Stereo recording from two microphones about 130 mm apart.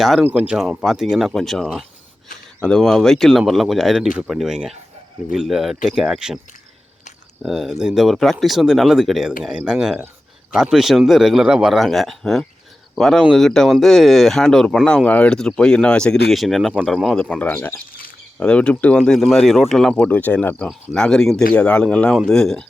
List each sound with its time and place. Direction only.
0.0 s speech: centre (ahead or behind)
7.4 s speech: centre (ahead or behind)